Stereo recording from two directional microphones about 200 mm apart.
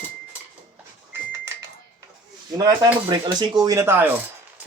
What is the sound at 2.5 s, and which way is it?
Speech, 20° right (ahead or behind).